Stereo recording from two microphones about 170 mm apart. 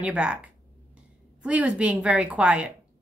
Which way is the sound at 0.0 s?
5° right (ahead or behind).